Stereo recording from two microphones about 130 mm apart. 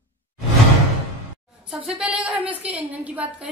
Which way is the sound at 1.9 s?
5° right (ahead or behind).